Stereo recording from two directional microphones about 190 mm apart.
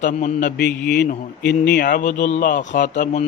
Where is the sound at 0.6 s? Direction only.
55° left (ahead or behind).